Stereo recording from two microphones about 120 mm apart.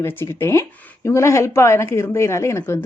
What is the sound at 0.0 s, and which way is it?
Speech, 20° left (ahead or behind).